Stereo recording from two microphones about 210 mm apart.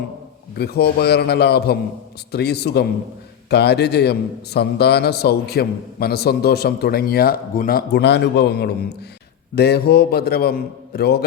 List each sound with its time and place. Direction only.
0.5 s a man's voice: 50° left (ahead or behind)